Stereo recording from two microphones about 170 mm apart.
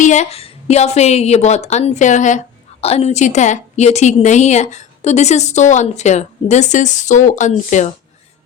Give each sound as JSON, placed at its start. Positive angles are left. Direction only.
{"t": 0.0, "sound": "a woman's voice", "side_deg": 45}